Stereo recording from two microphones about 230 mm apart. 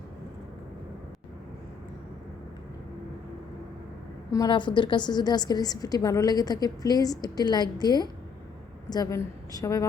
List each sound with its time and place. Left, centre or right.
4.3 s a woman's voice: centre